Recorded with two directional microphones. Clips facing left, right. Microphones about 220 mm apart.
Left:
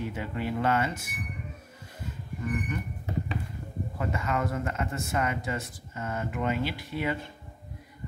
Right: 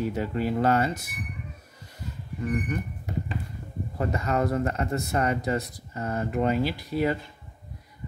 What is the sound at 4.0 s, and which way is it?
A man's voice, 40° right (ahead or behind).